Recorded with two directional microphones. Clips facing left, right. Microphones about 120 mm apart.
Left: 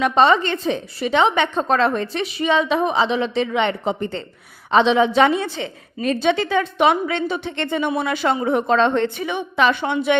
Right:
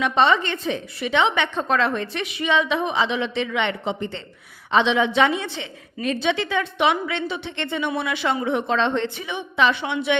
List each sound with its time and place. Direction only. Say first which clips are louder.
0.0 s a woman's voice: left 3 dB; 40° left (ahead or behind)